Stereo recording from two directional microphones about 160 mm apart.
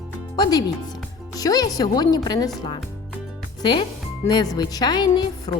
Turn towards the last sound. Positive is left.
turn(degrees=35)  # may be behind; listen again after turning